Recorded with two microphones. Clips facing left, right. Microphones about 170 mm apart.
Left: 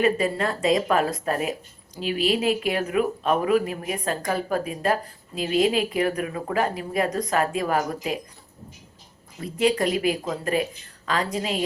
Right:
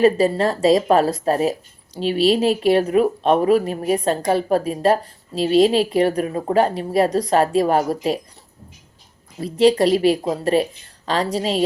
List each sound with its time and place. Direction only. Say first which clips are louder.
0.0 s speech: right 6 dB; 35° right (ahead or behind)
9.4 s speech: right 7 dB; 30° right (ahead or behind)